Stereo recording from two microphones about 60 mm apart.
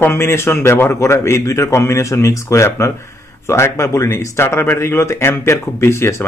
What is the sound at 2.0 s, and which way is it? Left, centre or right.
Speech, left.